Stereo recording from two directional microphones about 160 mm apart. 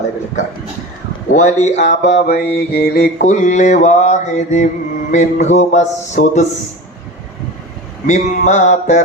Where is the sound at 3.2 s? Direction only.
50° left (ahead or behind).